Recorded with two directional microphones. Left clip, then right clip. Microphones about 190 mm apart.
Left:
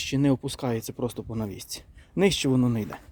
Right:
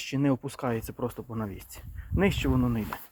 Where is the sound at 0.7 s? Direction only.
40° left (ahead or behind).